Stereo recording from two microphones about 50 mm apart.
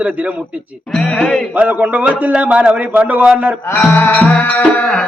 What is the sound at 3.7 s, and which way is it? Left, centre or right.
Music, left.